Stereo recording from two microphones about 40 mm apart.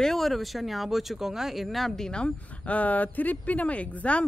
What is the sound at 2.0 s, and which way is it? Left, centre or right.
Speech, left.